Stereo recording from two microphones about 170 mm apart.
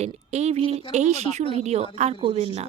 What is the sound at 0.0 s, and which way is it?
Speech, 40° right (ahead or behind).